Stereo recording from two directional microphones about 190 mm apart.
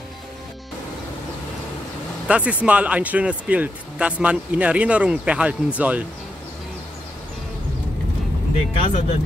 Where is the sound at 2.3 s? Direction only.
5° right (ahead or behind).